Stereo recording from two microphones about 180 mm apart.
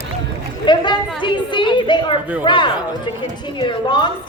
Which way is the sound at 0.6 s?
25° left (ahead or behind).